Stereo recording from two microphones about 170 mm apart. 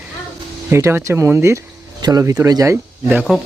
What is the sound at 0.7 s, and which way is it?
Speech, 15° right (ahead or behind).